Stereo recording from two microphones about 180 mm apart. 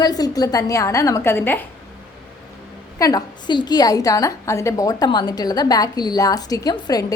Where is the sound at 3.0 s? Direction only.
20° left (ahead or behind).